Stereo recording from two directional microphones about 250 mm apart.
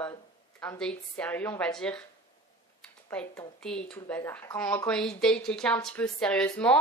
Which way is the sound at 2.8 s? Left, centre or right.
Centre.